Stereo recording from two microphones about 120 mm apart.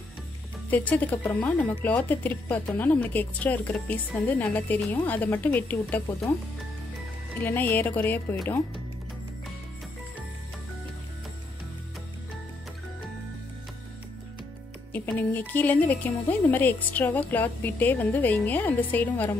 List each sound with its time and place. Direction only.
0.7 s a woman's voice: 15° left (ahead or behind)
7.3 s a woman's voice: 15° left (ahead or behind)
14.9 s a woman's voice: 15° left (ahead or behind)